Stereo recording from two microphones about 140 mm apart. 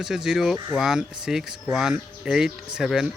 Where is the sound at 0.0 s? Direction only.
5° right (ahead or behind).